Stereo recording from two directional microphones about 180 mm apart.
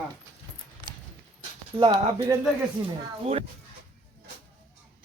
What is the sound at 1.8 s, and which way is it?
Speech, 20° right (ahead or behind).